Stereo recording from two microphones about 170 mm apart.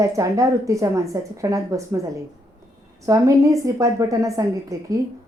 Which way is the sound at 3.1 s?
20° right (ahead or behind).